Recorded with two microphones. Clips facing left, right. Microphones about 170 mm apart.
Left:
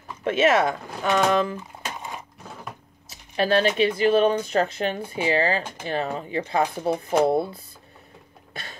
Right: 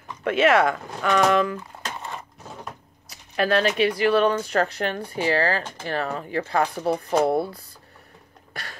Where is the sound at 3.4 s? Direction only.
25° left (ahead or behind).